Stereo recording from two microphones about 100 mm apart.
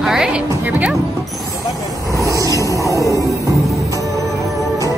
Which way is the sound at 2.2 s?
35° right (ahead or behind).